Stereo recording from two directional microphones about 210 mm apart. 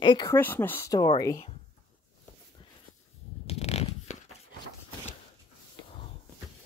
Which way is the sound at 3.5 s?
30° left (ahead or behind).